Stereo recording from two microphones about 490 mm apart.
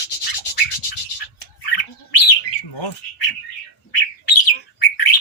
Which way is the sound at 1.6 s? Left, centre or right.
Left.